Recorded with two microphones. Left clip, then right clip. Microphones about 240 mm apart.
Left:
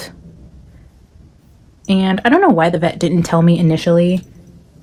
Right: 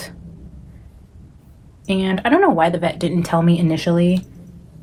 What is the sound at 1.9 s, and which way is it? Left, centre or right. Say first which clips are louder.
Speech: left 3 dB; left.